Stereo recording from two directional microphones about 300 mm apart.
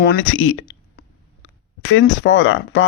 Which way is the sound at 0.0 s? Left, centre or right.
Left.